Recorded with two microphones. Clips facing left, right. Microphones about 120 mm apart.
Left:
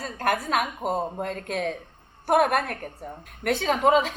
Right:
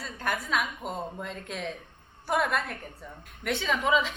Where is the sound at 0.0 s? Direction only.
50° left (ahead or behind).